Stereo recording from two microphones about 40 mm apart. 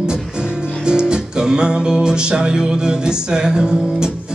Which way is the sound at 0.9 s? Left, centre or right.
Centre.